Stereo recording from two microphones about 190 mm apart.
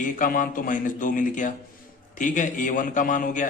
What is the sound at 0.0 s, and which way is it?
A man's voice, 45° left (ahead or behind).